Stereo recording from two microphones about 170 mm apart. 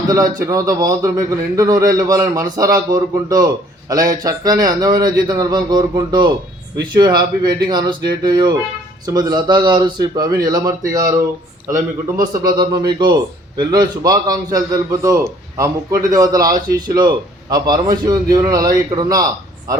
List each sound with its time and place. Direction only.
0.1 s a man's voice: 20° right (ahead or behind)
12.3 s a man's voice: 25° right (ahead or behind)